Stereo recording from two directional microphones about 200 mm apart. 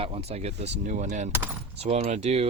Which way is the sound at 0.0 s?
30° right (ahead or behind).